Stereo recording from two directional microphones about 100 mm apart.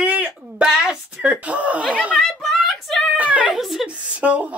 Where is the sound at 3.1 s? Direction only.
15° right (ahead or behind).